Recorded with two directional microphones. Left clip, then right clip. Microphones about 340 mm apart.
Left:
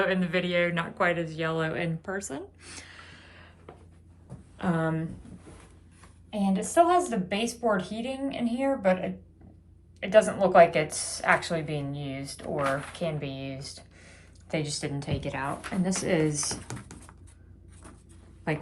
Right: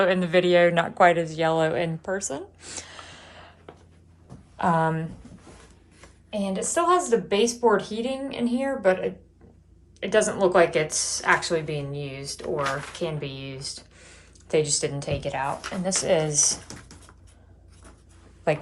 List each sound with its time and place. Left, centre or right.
0.0 s speech: centre
4.5 s speech: centre
6.3 s a woman's voice: centre
18.5 s speech: centre